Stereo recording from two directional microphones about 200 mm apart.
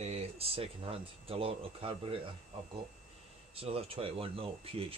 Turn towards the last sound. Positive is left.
turn(degrees=-30)  # may be behind; listen again after turning